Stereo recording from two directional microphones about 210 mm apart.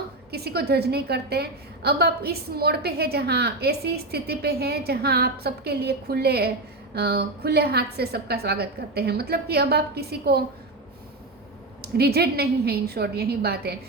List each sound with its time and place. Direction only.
0.3 s a woman's voice: 50° right (ahead or behind)
11.8 s a woman's voice: 50° right (ahead or behind)